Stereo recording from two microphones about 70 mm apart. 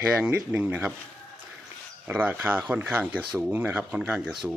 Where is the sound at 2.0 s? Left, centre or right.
Right.